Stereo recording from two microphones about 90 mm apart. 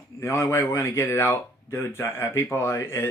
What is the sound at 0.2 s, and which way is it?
Speech, 30° left (ahead or behind).